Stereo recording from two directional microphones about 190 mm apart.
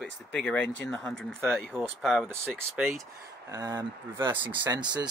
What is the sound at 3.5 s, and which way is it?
Speech, 20° right (ahead or behind).